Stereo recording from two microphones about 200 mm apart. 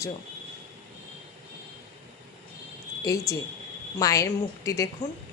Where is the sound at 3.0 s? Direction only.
15° left (ahead or behind).